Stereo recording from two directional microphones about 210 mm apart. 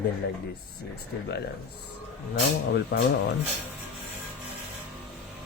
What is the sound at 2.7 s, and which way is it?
Speech, 50° left (ahead or behind).